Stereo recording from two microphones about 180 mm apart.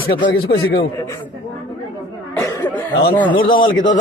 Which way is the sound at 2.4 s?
15° left (ahead or behind).